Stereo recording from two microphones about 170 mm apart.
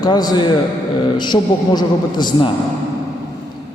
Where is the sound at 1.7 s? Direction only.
25° left (ahead or behind).